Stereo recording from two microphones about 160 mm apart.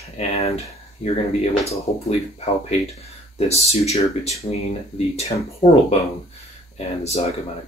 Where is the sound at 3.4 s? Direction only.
40° left (ahead or behind).